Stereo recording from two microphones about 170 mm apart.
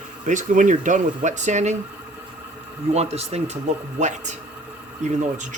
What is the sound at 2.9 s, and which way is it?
Speech, 40° right (ahead or behind).